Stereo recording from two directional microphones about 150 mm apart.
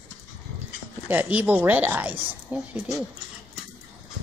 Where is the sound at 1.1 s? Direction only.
10° right (ahead or behind).